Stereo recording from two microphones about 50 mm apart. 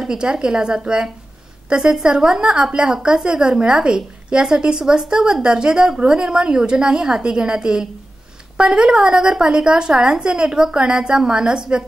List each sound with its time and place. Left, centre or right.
0.0 s a woman's voice: centre